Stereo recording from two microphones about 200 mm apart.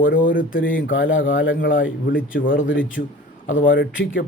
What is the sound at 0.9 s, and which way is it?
Speech, 70° left (ahead or behind).